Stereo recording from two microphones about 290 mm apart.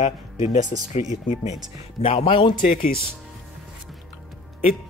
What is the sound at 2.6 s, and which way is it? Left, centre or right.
Speech, left.